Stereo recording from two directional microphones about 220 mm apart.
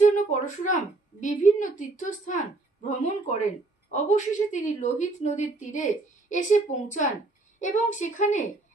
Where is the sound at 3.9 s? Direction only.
35° left (ahead or behind).